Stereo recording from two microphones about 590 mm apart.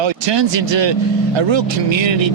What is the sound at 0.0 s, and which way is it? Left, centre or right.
Speech, right.